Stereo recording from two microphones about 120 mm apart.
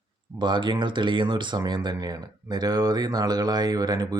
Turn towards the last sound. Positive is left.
turn(degrees=-35)  # may be behind; listen again after turning